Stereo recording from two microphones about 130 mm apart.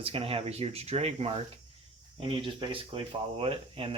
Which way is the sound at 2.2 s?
40° right (ahead or behind).